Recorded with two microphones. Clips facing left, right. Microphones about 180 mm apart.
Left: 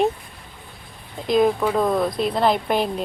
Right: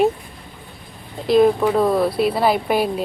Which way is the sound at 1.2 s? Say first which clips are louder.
Right 4 dB; 5° right (ahead or behind).